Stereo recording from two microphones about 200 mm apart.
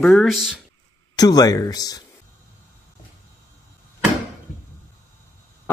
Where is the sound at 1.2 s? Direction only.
20° left (ahead or behind).